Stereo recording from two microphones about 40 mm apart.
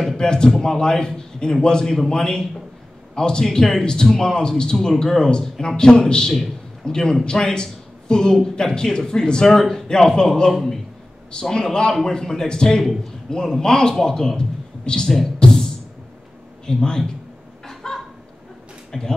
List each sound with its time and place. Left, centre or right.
0.2 s a man's voice: centre
10.5 s a man's voice: centre
11.5 s a man's voice: centre
15.3 s beatboxing: centre
16.6 s a man's voice: centre
17.6 s chicken: centre
18.9 s speech: centre